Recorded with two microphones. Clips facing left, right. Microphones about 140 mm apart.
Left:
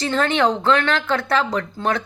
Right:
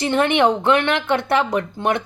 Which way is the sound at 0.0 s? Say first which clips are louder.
Right 2 dB; 20° right (ahead or behind).